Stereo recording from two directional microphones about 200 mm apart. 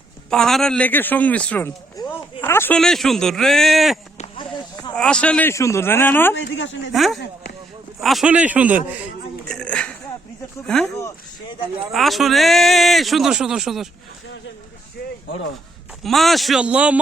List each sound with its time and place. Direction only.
0.3 s a man's voice: centre (ahead or behind)
4.2 s a sound: 25° left (ahead or behind)
4.9 s speech: 5° left (ahead or behind)
6.3 s speech: 65° left (ahead or behind)
6.9 s a man's voice: centre (ahead or behind)
9.5 s a sound: 5° left (ahead or behind)
10.9 s speech: 15° left (ahead or behind)
11.9 s a man's voice: centre (ahead or behind)
16.0 s a man's voice: centre (ahead or behind)